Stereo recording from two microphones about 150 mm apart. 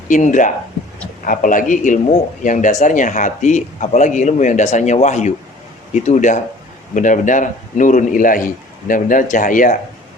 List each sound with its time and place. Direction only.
0.1 s a man's voice: 60° left (ahead or behind)